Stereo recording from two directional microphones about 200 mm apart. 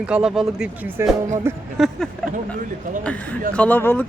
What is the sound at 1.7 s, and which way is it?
Speech, centre (ahead or behind).